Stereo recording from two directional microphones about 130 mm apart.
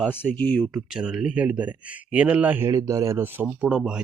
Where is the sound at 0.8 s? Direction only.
5° right (ahead or behind).